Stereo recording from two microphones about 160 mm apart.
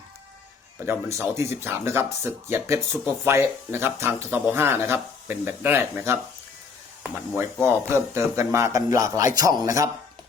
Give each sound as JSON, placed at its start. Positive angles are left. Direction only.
{"t": 0.9, "sound": "speech", "side_deg": -15}